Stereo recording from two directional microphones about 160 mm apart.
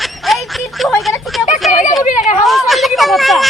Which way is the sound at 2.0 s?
50° left (ahead or behind).